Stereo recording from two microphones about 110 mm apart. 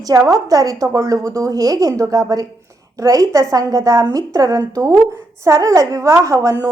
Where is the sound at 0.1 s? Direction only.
35° right (ahead or behind).